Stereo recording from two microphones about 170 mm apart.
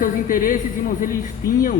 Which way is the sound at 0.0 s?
55° left (ahead or behind).